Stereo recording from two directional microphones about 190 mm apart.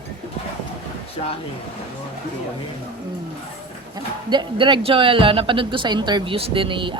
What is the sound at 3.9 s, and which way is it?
A man's voice, 25° right (ahead or behind).